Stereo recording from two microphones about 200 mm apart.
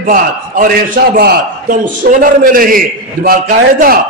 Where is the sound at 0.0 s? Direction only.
45° right (ahead or behind).